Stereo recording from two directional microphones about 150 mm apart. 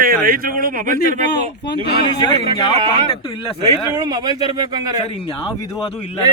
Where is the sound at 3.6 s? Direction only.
25° right (ahead or behind).